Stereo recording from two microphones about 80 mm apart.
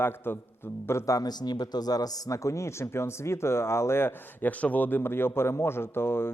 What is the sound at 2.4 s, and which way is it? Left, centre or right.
Speech, left.